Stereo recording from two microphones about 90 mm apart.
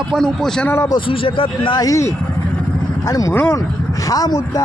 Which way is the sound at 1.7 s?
40° left (ahead or behind).